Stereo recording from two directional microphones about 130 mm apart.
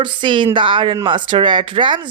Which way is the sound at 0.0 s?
40° right (ahead or behind).